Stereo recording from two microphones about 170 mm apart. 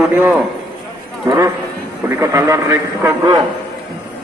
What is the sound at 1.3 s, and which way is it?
A man's voice, 15° right (ahead or behind).